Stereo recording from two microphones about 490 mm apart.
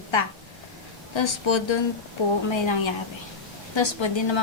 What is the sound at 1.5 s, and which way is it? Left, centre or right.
A woman's voice, left.